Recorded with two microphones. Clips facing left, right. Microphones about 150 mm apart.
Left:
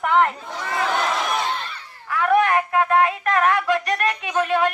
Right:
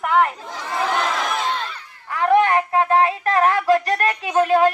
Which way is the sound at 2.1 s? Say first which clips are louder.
Right 2 dB; 30° right (ahead or behind).